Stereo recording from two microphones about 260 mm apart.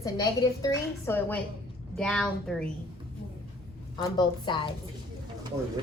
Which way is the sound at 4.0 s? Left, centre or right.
Centre.